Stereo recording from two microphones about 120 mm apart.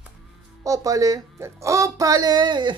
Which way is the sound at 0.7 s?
30° right (ahead or behind).